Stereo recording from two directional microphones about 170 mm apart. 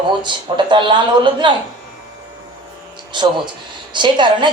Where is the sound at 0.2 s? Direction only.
30° right (ahead or behind).